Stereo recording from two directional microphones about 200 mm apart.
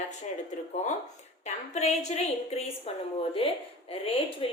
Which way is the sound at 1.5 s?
35° left (ahead or behind).